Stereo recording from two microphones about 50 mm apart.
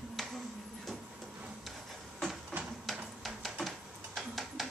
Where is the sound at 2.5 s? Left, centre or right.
Right.